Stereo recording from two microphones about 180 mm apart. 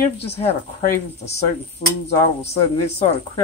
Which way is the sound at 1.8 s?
50° left (ahead or behind).